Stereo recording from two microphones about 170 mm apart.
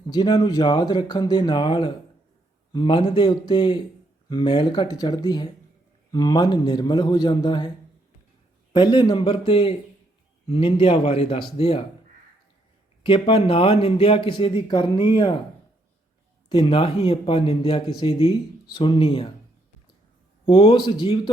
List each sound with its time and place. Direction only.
0.1 s speech: 25° left (ahead or behind)
8.7 s speech: 25° left (ahead or behind)
13.0 s speech: 30° left (ahead or behind)
16.5 s speech: 30° left (ahead or behind)
20.4 s speech: 30° left (ahead or behind)